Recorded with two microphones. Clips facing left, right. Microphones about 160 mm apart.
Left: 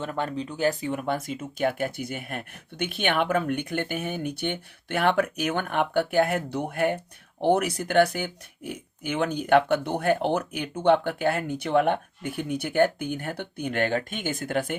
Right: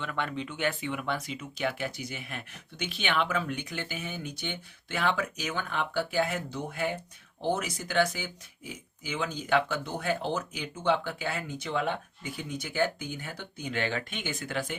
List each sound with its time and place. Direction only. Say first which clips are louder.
0.0 s speech: left 4 dB; 40° left (ahead or behind); by 14.8 s 55° left (ahead or behind)